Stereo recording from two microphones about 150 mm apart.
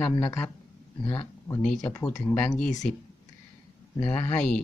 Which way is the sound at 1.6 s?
5° left (ahead or behind).